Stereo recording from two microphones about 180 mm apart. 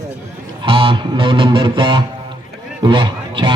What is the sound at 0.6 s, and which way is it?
A man's voice, 30° right (ahead or behind).